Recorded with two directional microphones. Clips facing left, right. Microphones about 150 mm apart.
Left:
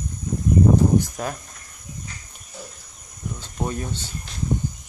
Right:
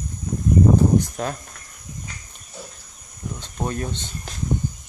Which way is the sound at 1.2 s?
5° left (ahead or behind).